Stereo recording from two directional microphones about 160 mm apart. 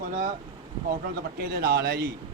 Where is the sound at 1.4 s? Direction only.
70° right (ahead or behind).